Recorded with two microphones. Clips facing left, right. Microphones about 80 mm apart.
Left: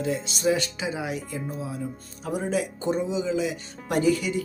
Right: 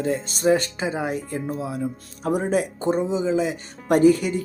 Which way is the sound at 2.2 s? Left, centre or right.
Right.